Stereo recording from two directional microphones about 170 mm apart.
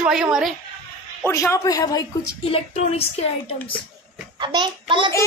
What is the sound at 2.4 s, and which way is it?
Speech, 35° left (ahead or behind).